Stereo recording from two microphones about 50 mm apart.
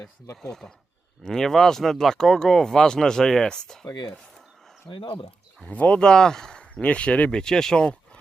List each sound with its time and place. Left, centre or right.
0.4 s speech: centre
4.9 s speech: centre
5.6 s speech: left
6.1 s speech: centre
6.8 s speech: left